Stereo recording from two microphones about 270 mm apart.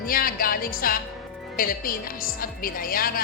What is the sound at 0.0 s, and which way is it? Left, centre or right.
A man's voice, left.